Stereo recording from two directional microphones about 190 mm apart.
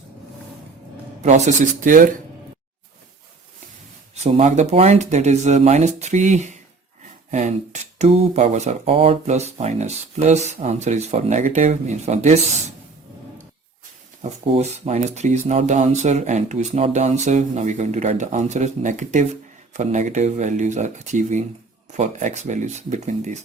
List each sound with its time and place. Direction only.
1.2 s speech: 40° right (ahead or behind)
4.1 s speech: 35° right (ahead or behind)
14.4 s speech: 35° right (ahead or behind)